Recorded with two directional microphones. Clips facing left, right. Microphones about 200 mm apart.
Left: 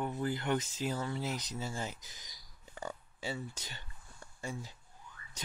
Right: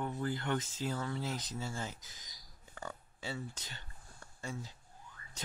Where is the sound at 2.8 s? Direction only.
15° left (ahead or behind).